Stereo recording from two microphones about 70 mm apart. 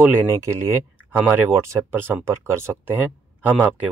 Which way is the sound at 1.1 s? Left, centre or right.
Right.